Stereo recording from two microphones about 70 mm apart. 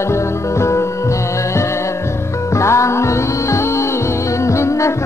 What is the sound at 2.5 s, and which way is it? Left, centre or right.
Music, left.